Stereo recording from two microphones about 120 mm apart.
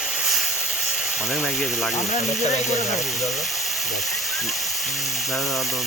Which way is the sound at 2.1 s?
75° left (ahead or behind).